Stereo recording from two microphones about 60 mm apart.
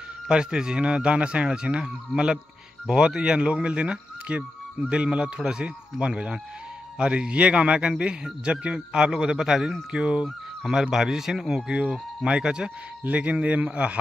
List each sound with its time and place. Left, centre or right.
0.3 s speech: centre